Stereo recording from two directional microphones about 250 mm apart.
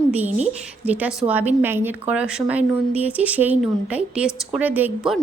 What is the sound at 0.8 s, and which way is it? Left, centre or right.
A woman's voice, centre.